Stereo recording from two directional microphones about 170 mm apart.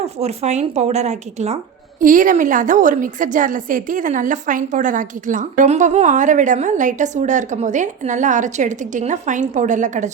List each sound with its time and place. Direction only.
0.0 s speech: 40° right (ahead or behind)
2.0 s a woman's voice: 50° right (ahead or behind)